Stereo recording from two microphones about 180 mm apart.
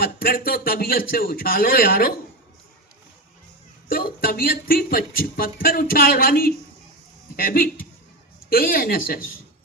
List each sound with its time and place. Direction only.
0.0 s speech: 55° left (ahead or behind)
3.8 s speech: 55° left (ahead or behind)